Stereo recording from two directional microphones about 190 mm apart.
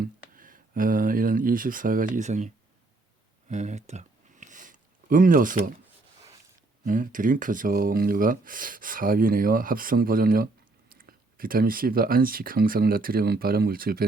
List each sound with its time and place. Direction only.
0.0 s speech: 45° right (ahead or behind)
3.5 s a sound: 40° right (ahead or behind)
6.8 s speech: 45° right (ahead or behind)